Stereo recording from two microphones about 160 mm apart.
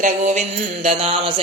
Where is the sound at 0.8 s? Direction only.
40° right (ahead or behind).